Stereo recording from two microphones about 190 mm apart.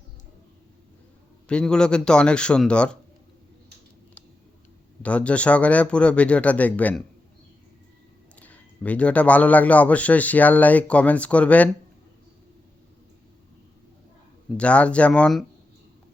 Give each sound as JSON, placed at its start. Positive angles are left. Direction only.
{"t": 1.5, "sound": "a man's voice", "side_deg": 5}
{"t": 5.0, "sound": "a man's voice", "side_deg": 5}
{"t": 8.4, "sound": "a man's voice", "side_deg": 10}
{"t": 14.5, "sound": "a man's voice", "side_deg": 5}